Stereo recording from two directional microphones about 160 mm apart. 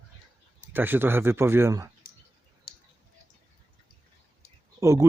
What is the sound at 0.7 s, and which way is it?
Speech, 10° right (ahead or behind).